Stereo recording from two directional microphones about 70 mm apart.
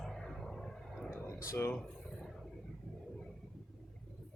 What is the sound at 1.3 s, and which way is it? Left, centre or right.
Speech, left.